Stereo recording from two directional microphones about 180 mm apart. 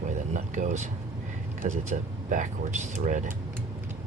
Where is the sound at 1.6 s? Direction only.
45° right (ahead or behind).